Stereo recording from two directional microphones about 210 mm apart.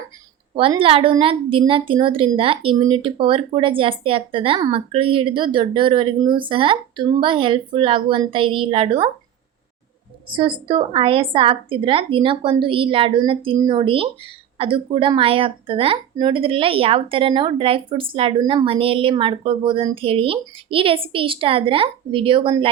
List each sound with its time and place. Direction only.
0.5 s a woman's voice: 25° right (ahead or behind)
10.3 s a woman's voice: 25° right (ahead or behind)